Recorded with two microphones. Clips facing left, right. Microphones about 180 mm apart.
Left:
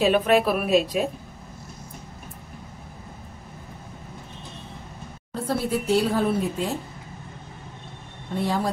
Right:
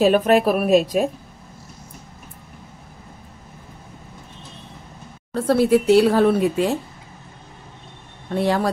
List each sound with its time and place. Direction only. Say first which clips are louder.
0.0 s a woman's voice: right 4 dB; 45° right (ahead or behind)
5.3 s speech: right 9 dB; 70° right (ahead or behind)
8.4 s speech: right 5 dB; 75° right (ahead or behind)